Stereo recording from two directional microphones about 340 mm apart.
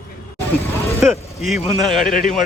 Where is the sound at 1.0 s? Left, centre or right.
Centre.